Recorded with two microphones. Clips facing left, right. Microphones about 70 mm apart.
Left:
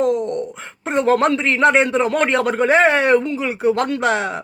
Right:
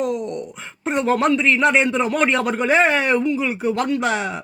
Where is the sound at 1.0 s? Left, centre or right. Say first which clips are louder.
Left 1 dB; left.